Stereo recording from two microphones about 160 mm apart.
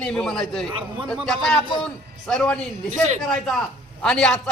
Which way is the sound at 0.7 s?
30° right (ahead or behind).